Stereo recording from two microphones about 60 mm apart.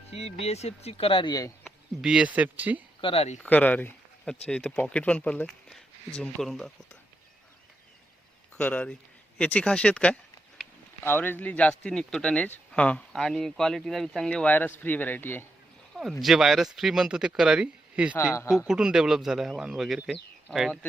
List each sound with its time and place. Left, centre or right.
1.3 s speech: left
2.0 s speech: centre
2.2 s speech: right
3.4 s speech: left
4.3 s speech: centre
5.5 s a sound: centre
6.4 s speech: centre
8.5 s speech: centre
11.0 s speech: left; by 14.3 s centre
14.3 s speech: left
16.2 s speech: centre
18.2 s speech: left
18.7 s speech: centre